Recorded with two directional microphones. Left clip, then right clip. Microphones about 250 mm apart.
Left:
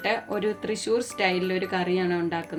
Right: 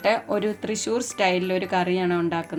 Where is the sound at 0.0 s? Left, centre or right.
Right.